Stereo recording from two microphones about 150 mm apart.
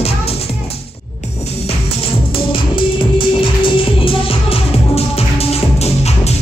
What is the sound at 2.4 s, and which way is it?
Music, 35° left (ahead or behind).